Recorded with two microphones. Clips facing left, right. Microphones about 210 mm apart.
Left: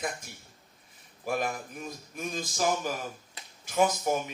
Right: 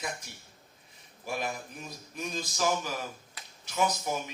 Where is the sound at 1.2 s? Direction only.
50° left (ahead or behind).